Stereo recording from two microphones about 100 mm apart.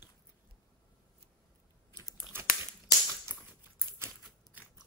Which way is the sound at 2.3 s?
25° right (ahead or behind).